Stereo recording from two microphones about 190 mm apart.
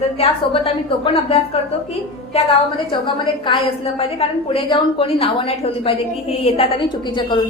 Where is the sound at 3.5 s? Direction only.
25° left (ahead or behind).